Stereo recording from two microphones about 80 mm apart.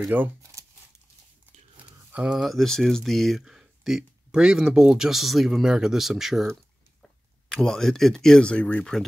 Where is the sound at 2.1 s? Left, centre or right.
Centre.